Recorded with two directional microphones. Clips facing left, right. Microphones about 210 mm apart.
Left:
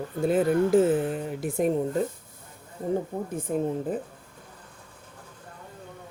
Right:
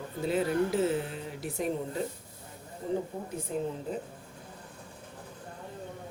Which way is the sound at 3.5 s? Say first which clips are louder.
Left 6 dB; 55° left (ahead or behind).